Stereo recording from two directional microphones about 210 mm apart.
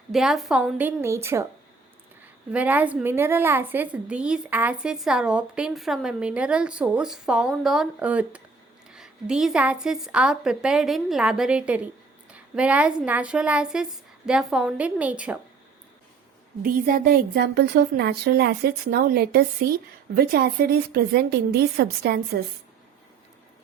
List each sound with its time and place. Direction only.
0.1 s a woman's voice: centre (ahead or behind)
12.3 s a sound: 5° right (ahead or behind)
13.1 s a woman's voice: 5° right (ahead or behind)
16.6 s a woman's voice: 45° right (ahead or behind)